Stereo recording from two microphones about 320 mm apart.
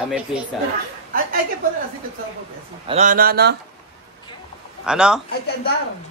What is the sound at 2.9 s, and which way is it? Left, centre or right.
Speech, right.